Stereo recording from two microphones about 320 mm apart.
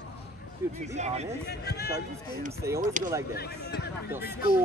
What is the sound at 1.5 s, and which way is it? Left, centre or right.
Speech, left.